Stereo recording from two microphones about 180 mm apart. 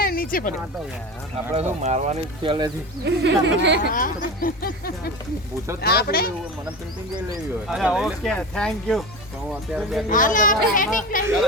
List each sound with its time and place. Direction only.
0.0 s a sound: 55° left (ahead or behind)
1.8 s speech: 40° right (ahead or behind)
3.0 s speech: 80° right
3.9 s speech: 50° left (ahead or behind)
7.7 s speech: 5° right (ahead or behind)
10.1 s speech: 45° left (ahead or behind)